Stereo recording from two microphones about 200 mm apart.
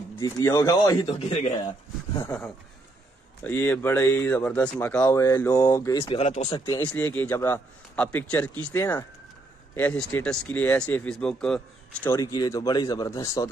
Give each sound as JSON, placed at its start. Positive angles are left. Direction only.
{"t": 0.1, "sound": "speech", "side_deg": 15}
{"t": 2.1, "sound": "speech", "side_deg": 15}
{"t": 3.4, "sound": "speech", "side_deg": 10}
{"t": 6.9, "sound": "speech", "side_deg": 10}
{"t": 12.1, "sound": "speech", "side_deg": 20}